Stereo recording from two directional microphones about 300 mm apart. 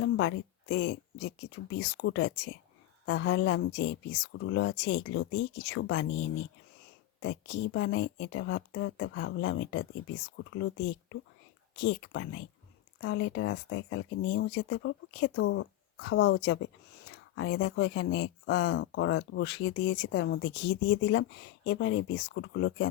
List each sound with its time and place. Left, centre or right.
0.0 s a woman's voice: left
7.2 s speech: left